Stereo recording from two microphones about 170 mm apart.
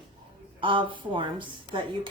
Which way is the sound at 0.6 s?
30° right (ahead or behind).